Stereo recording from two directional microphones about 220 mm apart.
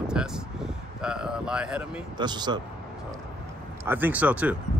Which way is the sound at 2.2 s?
20° right (ahead or behind).